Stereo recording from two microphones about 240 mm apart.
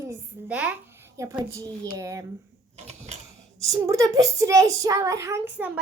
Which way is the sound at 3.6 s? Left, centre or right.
Centre.